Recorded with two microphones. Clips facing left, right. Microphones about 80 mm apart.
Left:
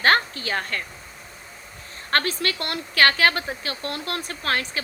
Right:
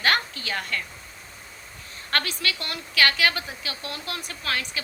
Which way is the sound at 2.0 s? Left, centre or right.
Left.